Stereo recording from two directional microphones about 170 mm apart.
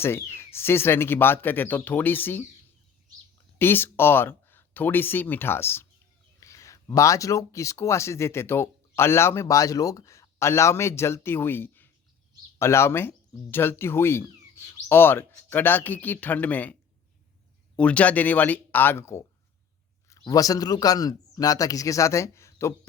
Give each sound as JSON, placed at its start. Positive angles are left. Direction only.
{"t": 0.0, "sound": "speech", "side_deg": 15}
{"t": 3.6, "sound": "speech", "side_deg": 15}
{"t": 17.7, "sound": "a man's voice", "side_deg": 5}